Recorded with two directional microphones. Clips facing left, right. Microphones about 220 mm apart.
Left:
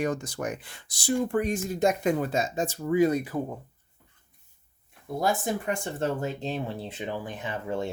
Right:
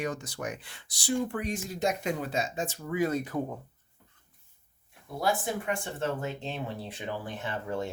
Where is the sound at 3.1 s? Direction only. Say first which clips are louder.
Left 2 dB; 10° left (ahead or behind).